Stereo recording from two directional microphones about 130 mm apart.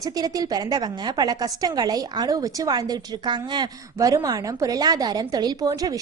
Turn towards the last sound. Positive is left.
turn(degrees=-30)  # may be behind; listen again after turning